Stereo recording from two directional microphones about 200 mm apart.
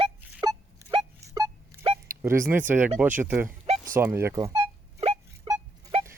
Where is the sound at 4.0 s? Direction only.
15° right (ahead or behind).